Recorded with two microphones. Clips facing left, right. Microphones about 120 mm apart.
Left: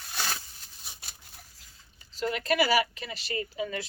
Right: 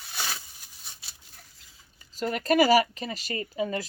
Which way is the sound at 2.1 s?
45° right (ahead or behind).